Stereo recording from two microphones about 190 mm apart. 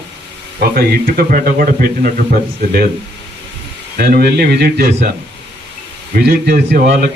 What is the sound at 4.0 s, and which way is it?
Speech, 55° right (ahead or behind).